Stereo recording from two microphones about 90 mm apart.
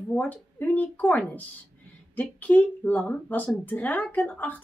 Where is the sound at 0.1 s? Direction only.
15° left (ahead or behind).